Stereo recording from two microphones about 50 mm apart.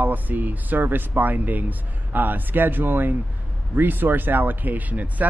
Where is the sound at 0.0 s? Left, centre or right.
Right.